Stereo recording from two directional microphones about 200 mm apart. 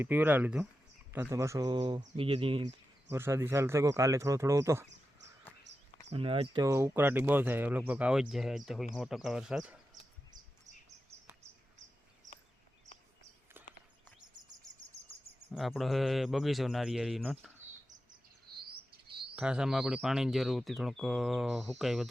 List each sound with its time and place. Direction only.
0.0 s speech: 10° right (ahead or behind); by 2.7 s 25° right (ahead or behind)
3.1 s speech: 10° right (ahead or behind)
6.1 s speech: 30° right (ahead or behind); by 9.7 s 5° right (ahead or behind)
15.5 s speech: centre (ahead or behind)
19.4 s speech: 5° right (ahead or behind)